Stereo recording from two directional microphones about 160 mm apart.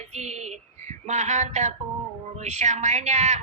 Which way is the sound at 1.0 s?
45° right (ahead or behind).